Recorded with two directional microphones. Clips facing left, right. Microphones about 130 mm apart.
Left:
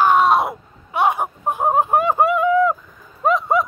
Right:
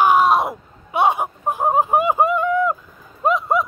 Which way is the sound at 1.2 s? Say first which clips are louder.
Even; centre (ahead or behind).